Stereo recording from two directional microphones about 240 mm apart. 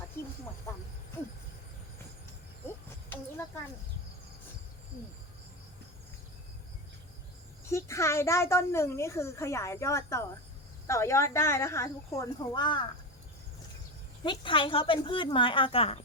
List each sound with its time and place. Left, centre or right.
7.6 s a woman's voice: centre
14.3 s a woman's voice: left